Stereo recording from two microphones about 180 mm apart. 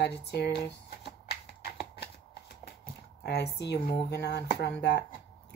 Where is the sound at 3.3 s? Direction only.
65° left (ahead or behind).